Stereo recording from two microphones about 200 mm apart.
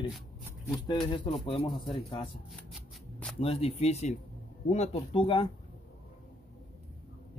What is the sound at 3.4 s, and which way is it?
Speech, 30° left (ahead or behind).